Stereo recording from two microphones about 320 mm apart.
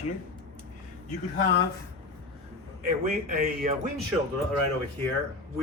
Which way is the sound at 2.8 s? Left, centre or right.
Right.